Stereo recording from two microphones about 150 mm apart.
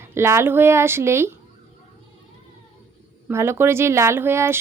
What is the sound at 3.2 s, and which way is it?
Speech, 15° right (ahead or behind).